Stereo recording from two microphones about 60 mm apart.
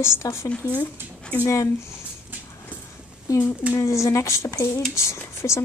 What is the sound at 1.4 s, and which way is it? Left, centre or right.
Speech, left.